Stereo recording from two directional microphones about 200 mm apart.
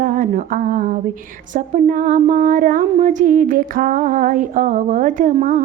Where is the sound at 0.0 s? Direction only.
40° right (ahead or behind).